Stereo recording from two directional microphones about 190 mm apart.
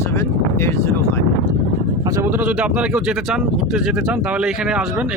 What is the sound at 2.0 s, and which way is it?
Speech, 15° right (ahead or behind).